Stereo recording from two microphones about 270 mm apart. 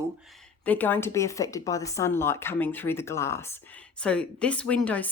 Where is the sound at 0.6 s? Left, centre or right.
Centre.